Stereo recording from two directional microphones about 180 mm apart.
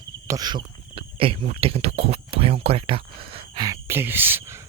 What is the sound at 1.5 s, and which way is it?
Speech, 35° right (ahead or behind).